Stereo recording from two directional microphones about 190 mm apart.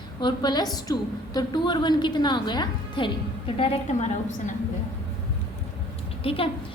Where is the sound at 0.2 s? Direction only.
25° left (ahead or behind).